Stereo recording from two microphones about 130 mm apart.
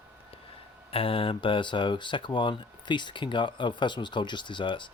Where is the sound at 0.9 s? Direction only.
45° left (ahead or behind).